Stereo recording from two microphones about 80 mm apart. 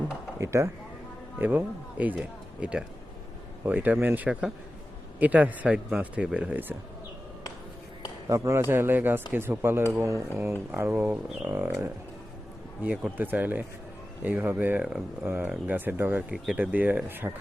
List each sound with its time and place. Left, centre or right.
0.3 s speech: right
1.4 s speech: right
8.3 s speech: right
12.8 s speech: centre
15.7 s speech: right